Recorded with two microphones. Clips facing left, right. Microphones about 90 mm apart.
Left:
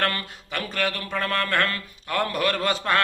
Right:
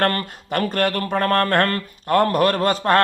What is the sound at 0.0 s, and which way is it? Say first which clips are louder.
Speech: right 6 dB; 45° right (ahead or behind).